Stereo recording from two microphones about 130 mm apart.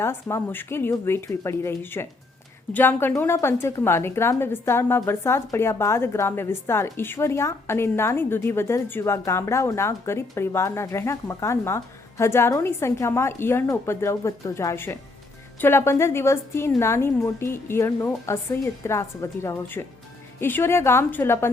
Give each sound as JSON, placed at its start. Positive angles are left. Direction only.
{"t": 0.0, "sound": "a woman's voice", "side_deg": 20}